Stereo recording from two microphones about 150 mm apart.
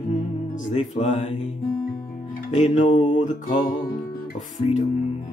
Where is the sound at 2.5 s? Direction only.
55° left (ahead or behind).